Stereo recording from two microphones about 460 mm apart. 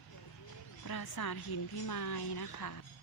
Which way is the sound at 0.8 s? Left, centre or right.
Left.